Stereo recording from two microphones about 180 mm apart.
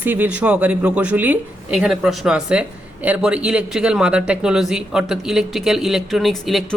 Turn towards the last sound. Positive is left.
turn(degrees=0)  # may be behind; listen again after turning